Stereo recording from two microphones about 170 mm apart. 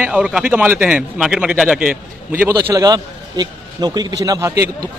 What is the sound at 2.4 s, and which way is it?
A man's voice, 20° right (ahead or behind).